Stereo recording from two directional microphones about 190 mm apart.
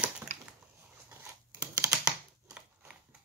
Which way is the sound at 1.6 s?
10° right (ahead or behind).